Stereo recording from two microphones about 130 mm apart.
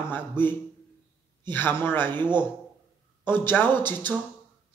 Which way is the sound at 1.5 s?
15° left (ahead or behind).